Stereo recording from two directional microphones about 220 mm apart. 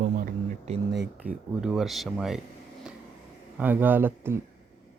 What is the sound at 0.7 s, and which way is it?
Speech, 30° right (ahead or behind).